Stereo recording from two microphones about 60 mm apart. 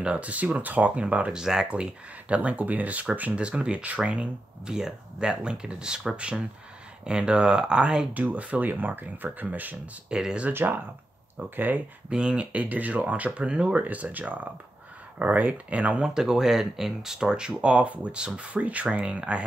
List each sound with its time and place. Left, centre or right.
0.0 s speech: right
8.1 s speech: right
10.0 s speech: centre
10.5 s speech: right
12.1 s speech: centre
16.1 s speech: centre